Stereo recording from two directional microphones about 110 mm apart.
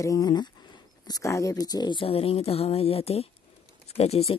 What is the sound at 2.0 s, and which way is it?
Speech, 65° left (ahead or behind).